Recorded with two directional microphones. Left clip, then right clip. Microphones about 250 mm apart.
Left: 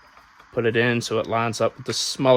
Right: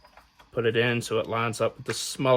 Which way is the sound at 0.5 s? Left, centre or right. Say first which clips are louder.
Left 3 dB; left.